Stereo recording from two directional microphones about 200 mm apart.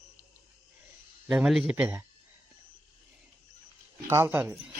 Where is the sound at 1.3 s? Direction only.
Centre (ahead or behind).